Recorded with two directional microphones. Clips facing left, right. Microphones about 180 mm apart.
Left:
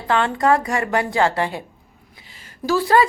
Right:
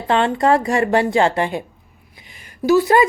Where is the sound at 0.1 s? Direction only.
25° right (ahead or behind).